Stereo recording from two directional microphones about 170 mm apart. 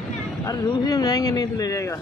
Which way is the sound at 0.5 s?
20° left (ahead or behind).